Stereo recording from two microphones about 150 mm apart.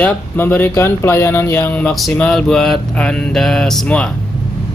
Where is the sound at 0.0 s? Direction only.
10° left (ahead or behind).